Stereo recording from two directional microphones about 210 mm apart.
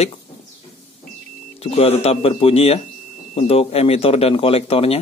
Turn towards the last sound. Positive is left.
turn(degrees=30)  # may be behind; listen again after turning